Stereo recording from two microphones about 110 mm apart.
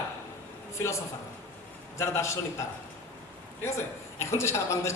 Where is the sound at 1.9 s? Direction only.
25° left (ahead or behind).